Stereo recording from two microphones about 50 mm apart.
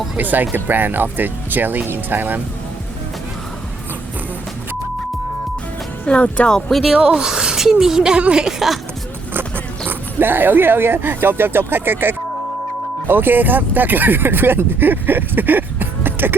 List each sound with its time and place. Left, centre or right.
0.2 s speech: right
6.1 s speech: left
6.5 s speech: centre
7.2 s a woman's voice: centre
9.3 s speech: right